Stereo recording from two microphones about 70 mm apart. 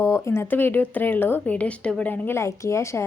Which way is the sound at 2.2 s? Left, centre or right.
Left.